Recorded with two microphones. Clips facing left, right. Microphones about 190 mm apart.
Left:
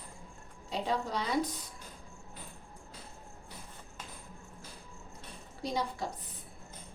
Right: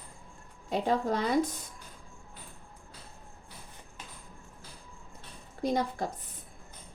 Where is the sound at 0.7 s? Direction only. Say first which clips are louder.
Right 5 dB; 50° right (ahead or behind).